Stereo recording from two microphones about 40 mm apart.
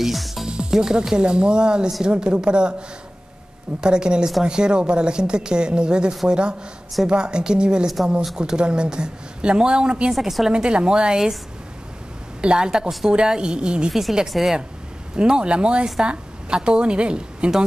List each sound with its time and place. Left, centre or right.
0.0 s music: centre
0.5 s a woman's voice: centre
3.8 s a woman's voice: right
12.4 s a woman's voice: right
14.3 s a woman's voice: centre
15.1 s a woman's voice: right